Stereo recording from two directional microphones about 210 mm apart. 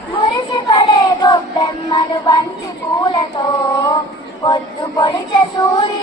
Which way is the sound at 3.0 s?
20° left (ahead or behind).